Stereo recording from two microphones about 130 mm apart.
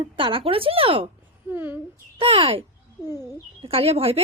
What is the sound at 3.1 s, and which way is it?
Speech, 20° right (ahead or behind).